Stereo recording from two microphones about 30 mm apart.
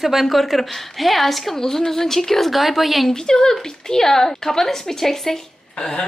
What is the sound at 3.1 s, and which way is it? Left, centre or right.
Speech, left.